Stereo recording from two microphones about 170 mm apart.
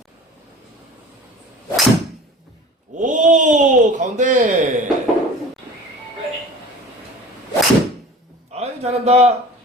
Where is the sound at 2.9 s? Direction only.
50° right (ahead or behind).